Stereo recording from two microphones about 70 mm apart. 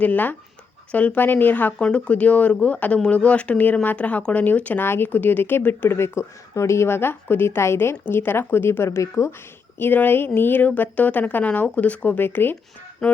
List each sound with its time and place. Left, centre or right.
0.0 s speech: left
9.7 s speech: left
13.0 s a sound: centre